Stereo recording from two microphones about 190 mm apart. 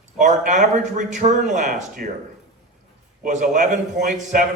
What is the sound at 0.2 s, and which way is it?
Speech, 40° right (ahead or behind).